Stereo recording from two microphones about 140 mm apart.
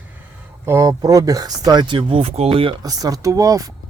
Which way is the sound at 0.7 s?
25° right (ahead or behind).